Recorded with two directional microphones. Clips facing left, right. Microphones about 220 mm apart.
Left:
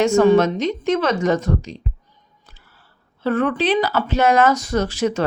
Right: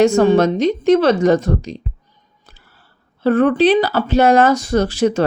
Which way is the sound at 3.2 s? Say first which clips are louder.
Right 6 dB; 35° right (ahead or behind).